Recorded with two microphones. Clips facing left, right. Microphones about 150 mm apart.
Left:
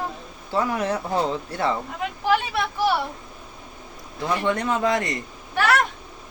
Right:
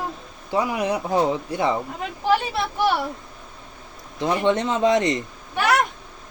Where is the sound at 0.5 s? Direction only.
15° right (ahead or behind).